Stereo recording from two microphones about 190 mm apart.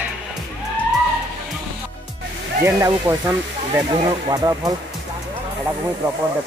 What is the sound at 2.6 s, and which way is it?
Speech, 15° right (ahead or behind).